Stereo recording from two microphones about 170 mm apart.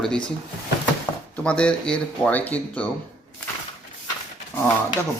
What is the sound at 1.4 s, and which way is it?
Speech, 5° left (ahead or behind).